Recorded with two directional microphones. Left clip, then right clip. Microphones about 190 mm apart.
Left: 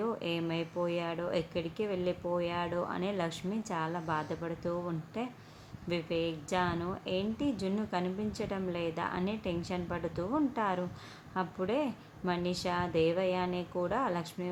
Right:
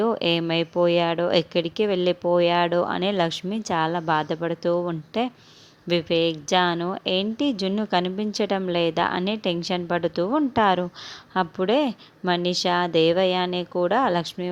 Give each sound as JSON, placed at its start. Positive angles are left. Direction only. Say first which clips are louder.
{"t": 0.0, "sound": "a woman's voice", "louder": "right 12 dB", "side_deg": -45}